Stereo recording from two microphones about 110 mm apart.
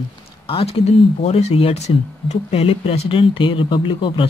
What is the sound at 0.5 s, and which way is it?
Speech, 60° left (ahead or behind).